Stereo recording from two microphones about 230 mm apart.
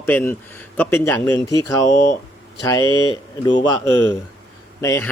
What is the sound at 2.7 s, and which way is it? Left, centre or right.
Speech, centre.